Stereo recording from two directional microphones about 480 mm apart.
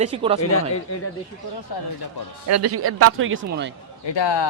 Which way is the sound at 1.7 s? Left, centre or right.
Left.